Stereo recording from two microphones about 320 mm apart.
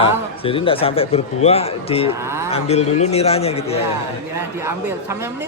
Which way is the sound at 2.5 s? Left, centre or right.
Centre.